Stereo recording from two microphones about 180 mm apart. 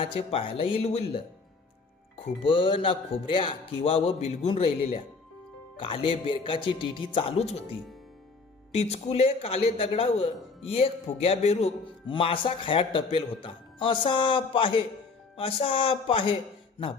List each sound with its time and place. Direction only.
0.0 s a man's voice: 30° left (ahead or behind)